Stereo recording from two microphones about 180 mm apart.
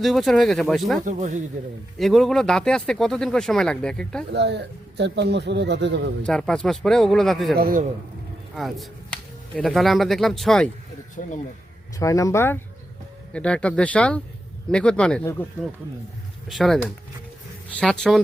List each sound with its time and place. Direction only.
0.0 s speech: centre (ahead or behind)
1.0 s speech: 45° right (ahead or behind)
2.0 s speech: centre (ahead or behind)
4.3 s speech: 70° right (ahead or behind)
6.2 s speech: 5° left (ahead or behind)
7.5 s speech: 55° right (ahead or behind)
8.5 s speech: centre (ahead or behind)
11.9 s speech: 15° left (ahead or behind)
16.5 s speech: centre (ahead or behind)